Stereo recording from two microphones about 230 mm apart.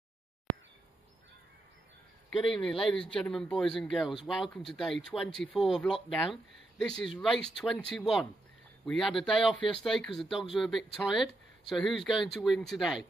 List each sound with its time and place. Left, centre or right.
2.2 s speech: centre